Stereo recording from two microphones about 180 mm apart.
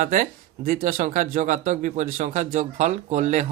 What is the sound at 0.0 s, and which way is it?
Speech, 45° right (ahead or behind).